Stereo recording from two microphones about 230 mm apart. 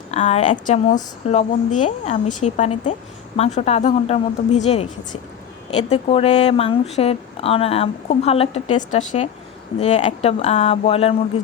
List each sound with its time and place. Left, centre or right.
0.1 s speech: left
5.9 s speech: left